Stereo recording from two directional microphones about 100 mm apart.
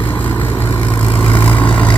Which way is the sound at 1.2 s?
65° left (ahead or behind).